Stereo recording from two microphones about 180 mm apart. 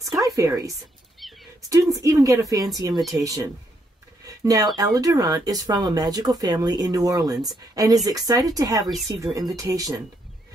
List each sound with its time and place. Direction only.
0.4 s speech: 20° right (ahead or behind)
1.2 s a sound: centre (ahead or behind)
1.7 s speech: 20° right (ahead or behind)
2.9 s speech: centre (ahead or behind)
3.2 s speech: 20° right (ahead or behind)
4.3 s a sound: 20° right (ahead or behind)
4.7 s speech: 20° right (ahead or behind)